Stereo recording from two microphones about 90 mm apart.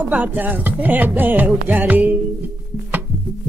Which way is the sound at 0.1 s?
20° right (ahead or behind).